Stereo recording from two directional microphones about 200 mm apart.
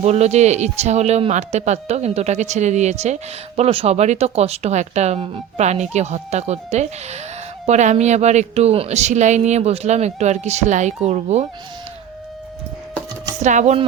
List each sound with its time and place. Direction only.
0.0 s speech: 35° right (ahead or behind)
13.4 s speech: 35° right (ahead or behind)